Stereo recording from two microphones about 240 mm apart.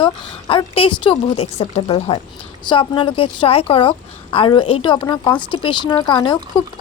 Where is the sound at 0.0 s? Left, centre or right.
Left.